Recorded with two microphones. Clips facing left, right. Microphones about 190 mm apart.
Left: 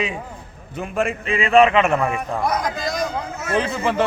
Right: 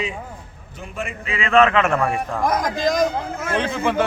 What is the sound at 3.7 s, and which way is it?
Speech, centre (ahead or behind).